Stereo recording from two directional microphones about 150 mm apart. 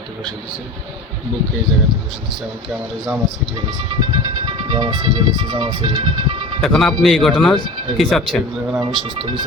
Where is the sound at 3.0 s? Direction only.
Centre (ahead or behind).